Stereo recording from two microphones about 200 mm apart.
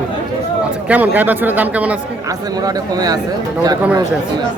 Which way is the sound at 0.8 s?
10° right (ahead or behind).